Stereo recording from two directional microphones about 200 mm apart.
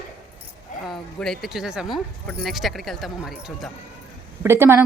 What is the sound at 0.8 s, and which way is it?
Speech, centre (ahead or behind).